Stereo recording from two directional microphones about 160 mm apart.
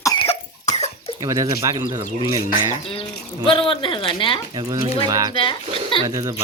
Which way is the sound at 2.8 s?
35° left (ahead or behind).